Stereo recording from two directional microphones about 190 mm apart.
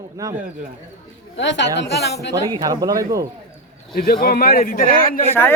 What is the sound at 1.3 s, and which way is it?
Speech, 70° left (ahead or behind).